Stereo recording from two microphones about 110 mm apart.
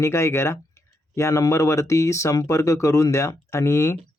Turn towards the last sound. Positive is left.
turn(degrees=25)  # may be behind; listen again after turning